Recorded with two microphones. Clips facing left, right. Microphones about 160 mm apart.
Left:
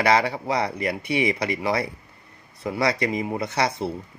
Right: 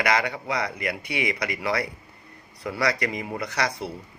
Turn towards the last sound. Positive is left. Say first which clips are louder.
# left 4 dB
turn(degrees=25)  # may be behind; listen again after turning